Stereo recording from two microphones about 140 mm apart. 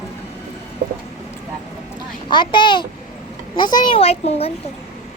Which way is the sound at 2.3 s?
35° left (ahead or behind).